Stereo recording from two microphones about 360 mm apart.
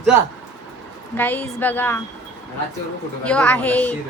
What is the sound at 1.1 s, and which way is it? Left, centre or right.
Speech, centre.